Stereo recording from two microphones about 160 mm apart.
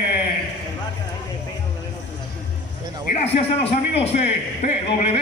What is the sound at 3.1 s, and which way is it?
A man's voice, 40° left (ahead or behind).